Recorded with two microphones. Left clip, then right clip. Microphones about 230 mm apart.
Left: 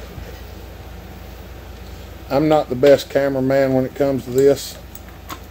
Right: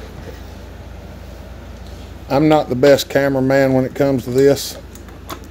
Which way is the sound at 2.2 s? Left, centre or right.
Right.